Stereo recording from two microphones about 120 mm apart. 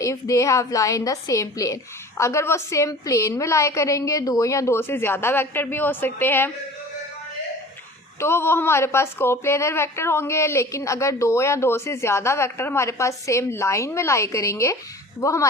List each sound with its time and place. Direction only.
0.0 s a woman's voice: 25° left (ahead or behind)
8.2 s a woman's voice: 20° left (ahead or behind)